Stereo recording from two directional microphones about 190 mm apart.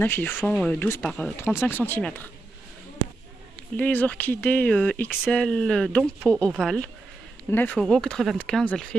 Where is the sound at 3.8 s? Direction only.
10° left (ahead or behind).